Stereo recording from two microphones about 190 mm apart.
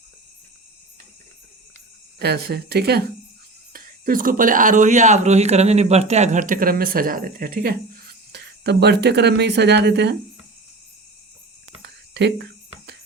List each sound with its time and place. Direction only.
2.1 s speech: 60° right (ahead or behind)
11.8 s whispering: 65° right (ahead or behind)